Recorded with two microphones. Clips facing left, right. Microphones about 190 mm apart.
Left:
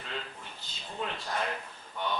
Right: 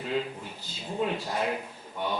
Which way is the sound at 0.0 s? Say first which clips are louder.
Right 10 dB; 10° right (ahead or behind).